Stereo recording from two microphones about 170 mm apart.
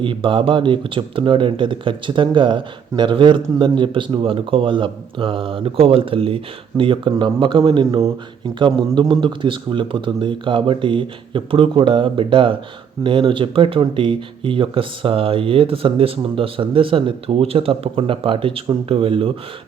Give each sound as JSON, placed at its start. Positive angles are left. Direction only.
{"t": 0.0, "sound": "speech", "side_deg": -30}